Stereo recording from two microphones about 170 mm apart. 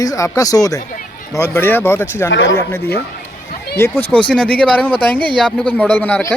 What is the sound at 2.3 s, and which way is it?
Speech, 90° left.